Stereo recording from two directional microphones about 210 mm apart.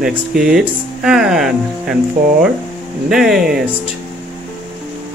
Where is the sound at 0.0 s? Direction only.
5° right (ahead or behind).